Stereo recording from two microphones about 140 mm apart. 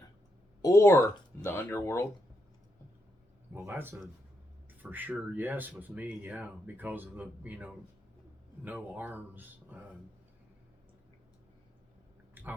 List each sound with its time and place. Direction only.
0.6 s speech: 20° left (ahead or behind)
3.5 s speech: 15° right (ahead or behind)
12.3 s a sound: 15° right (ahead or behind)